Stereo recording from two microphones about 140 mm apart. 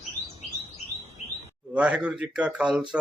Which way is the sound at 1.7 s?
10° right (ahead or behind).